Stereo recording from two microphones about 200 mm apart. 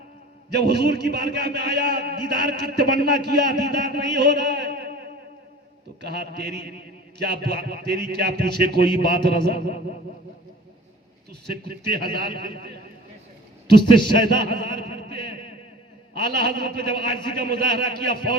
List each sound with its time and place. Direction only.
0.5 s a man's voice: 55° right (ahead or behind)
11.3 s a man's voice: 55° right (ahead or behind)
13.8 s a man's voice: 25° left (ahead or behind)
14.2 s a sound: 60° right (ahead or behind)
16.1 s a man's voice: 55° right (ahead or behind)